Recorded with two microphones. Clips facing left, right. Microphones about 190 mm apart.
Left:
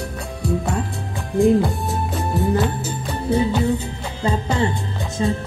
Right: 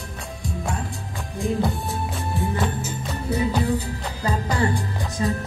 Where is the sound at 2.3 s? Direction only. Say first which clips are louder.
Left 6 dB; 35° left (ahead or behind).